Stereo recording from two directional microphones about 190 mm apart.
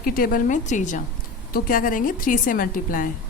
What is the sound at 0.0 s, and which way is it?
A woman's voice, 50° left (ahead or behind).